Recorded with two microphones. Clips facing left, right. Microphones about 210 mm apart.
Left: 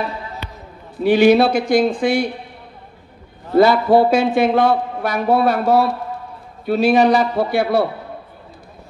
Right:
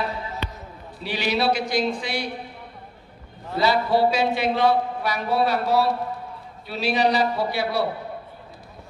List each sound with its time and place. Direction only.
0.9 s speech: 50° left (ahead or behind)
3.5 s speech: 50° left (ahead or behind)